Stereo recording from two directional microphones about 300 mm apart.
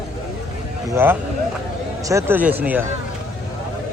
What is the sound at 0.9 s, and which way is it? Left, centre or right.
A man's voice, centre.